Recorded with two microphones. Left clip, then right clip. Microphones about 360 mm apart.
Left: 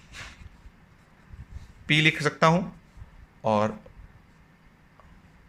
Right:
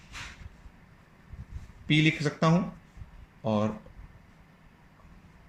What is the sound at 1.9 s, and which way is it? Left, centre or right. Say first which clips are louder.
Speech: left 4 dB; left.